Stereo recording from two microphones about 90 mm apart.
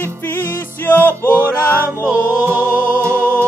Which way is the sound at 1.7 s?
25° right (ahead or behind).